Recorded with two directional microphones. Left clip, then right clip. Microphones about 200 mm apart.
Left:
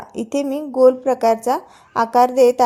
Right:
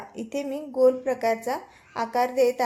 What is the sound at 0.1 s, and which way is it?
A woman's voice, 40° left (ahead or behind).